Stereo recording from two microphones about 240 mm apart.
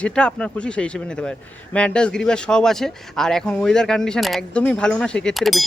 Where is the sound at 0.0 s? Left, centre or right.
Centre.